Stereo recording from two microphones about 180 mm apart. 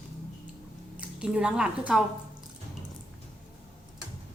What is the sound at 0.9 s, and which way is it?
A woman's voice, 5° right (ahead or behind).